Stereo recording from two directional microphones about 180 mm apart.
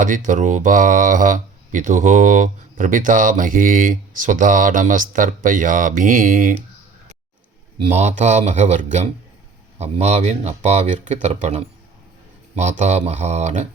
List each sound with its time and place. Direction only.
0.0 s speech: 45° right (ahead or behind)
7.8 s speech: 40° right (ahead or behind)